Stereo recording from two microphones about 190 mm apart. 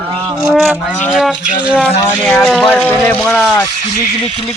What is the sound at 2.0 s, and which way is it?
Speech, 10° left (ahead or behind).